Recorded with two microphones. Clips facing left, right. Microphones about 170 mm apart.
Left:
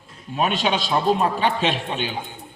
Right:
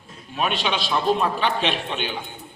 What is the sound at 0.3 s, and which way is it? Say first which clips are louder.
Speech: left 3 dB; 40° left (ahead or behind).